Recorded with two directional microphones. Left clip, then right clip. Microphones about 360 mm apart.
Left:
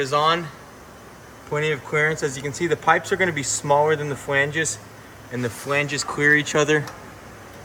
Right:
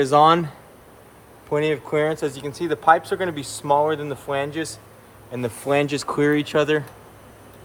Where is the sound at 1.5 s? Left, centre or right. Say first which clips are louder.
Right 1 dB; centre.